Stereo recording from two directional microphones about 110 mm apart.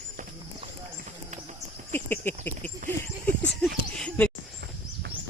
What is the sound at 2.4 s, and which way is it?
Speech, 20° left (ahead or behind).